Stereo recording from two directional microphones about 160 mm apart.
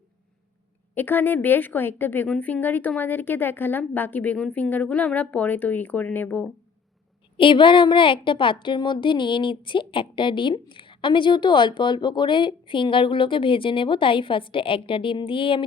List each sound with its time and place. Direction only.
0.9 s a woman's voice: 10° left (ahead or behind)
7.3 s a woman's voice: 30° left (ahead or behind)